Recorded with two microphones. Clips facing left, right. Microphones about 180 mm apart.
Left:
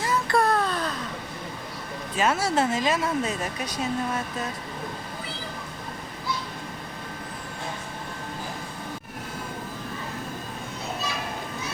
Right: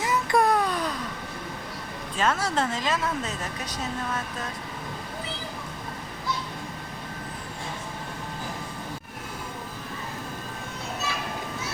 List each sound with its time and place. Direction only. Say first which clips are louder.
0.0 s baby cry: even; 20° right (ahead or behind)
2.1 s speech: left 2 dB; 10° left (ahead or behind)